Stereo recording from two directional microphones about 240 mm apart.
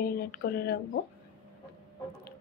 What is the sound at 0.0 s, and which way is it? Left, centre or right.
Speech, left.